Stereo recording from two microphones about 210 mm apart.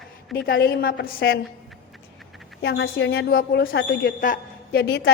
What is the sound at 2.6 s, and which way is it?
Speech, 50° left (ahead or behind).